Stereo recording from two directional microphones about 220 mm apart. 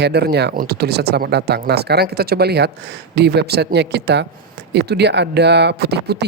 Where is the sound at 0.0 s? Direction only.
50° right (ahead or behind).